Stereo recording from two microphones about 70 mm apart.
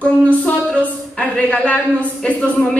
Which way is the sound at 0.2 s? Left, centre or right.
Centre.